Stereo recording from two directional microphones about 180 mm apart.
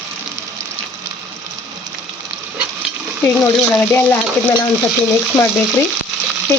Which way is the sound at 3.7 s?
10° left (ahead or behind).